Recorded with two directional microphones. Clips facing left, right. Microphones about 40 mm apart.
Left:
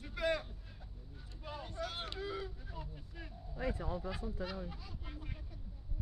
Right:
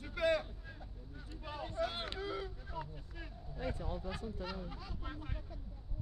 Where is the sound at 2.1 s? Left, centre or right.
Centre.